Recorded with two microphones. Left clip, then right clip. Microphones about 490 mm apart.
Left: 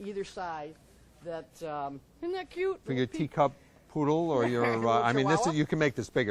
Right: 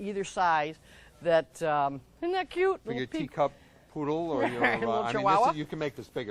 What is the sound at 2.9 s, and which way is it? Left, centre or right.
Speech, left.